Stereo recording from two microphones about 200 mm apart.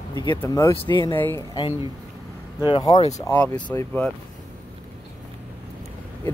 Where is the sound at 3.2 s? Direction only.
5° left (ahead or behind).